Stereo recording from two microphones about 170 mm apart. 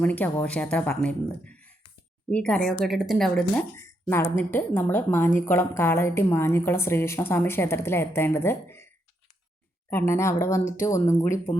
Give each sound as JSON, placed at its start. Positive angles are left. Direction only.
{"t": 0.0, "sound": "a woman's voice", "side_deg": 10}
{"t": 1.5, "sound": "a sound", "side_deg": 5}
{"t": 2.3, "sound": "a woman's voice", "side_deg": 5}
{"t": 3.8, "sound": "a woman's voice", "side_deg": 15}
{"t": 9.9, "sound": "a woman's voice", "side_deg": 15}